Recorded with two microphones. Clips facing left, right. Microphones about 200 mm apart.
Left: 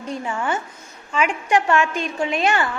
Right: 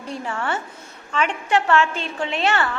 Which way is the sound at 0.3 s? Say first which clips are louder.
Left 1 dB; 10° left (ahead or behind).